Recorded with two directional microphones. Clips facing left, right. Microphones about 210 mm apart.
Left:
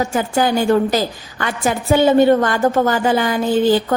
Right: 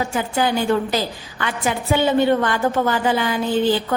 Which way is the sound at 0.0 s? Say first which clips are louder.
Left 4 dB; 45° left (ahead or behind).